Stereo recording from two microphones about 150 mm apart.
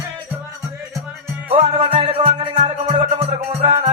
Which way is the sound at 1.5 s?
40° right (ahead or behind).